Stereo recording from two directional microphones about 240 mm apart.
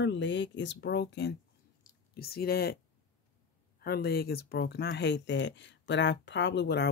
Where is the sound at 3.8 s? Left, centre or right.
Left.